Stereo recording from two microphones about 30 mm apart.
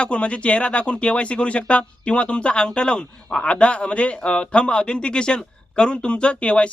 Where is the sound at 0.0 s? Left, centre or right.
Left.